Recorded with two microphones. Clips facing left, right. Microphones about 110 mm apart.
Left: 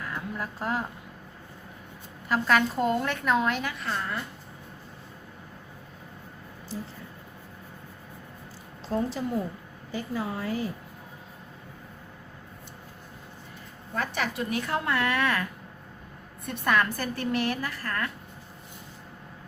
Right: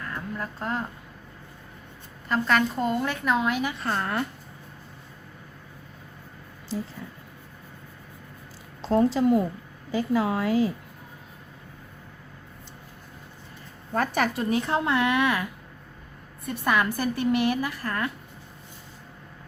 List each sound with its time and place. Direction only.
0.0 s a sound: 5° left (ahead or behind)
2.3 s a woman's voice: centre (ahead or behind)
3.8 s a woman's voice: 50° right (ahead or behind)
8.8 s a woman's voice: 90° right
13.9 s a woman's voice: 45° right (ahead or behind)
14.5 s speech: 25° right (ahead or behind)
16.5 s a woman's voice: 10° right (ahead or behind)